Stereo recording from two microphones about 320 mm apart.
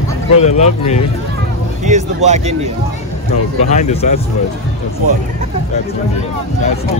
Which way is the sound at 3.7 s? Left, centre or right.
Left.